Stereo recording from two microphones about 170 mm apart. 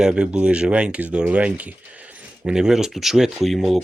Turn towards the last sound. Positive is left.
turn(degrees=0)  # may be behind; listen again after turning